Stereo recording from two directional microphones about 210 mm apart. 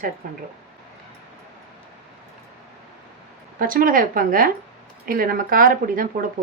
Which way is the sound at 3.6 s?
40° right (ahead or behind).